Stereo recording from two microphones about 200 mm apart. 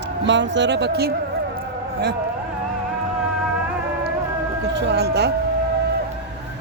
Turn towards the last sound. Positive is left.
turn(degrees=-55)  # may be behind; listen again after turning